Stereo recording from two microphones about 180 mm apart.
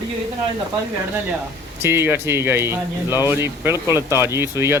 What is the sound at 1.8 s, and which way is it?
Speech, 10° right (ahead or behind).